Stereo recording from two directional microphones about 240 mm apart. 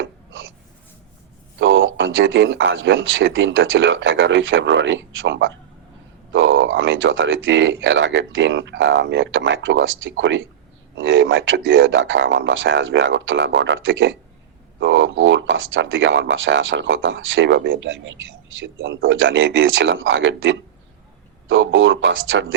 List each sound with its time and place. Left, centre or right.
1.5 s speech: right